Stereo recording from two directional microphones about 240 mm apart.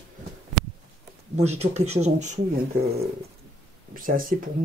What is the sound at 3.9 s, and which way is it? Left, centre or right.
Speech, right.